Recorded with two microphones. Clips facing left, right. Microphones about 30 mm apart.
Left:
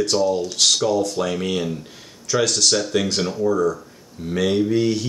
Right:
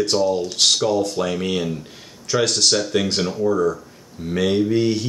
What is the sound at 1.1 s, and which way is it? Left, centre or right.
Speech, centre.